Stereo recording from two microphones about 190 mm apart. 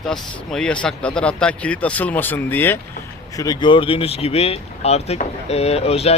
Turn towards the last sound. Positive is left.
turn(degrees=30)  # may be behind; listen again after turning